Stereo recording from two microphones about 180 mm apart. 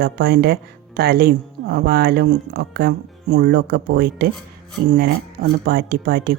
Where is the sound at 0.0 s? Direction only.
65° right (ahead or behind).